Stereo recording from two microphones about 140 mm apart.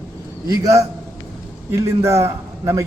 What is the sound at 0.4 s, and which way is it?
A man's voice, 25° right (ahead or behind).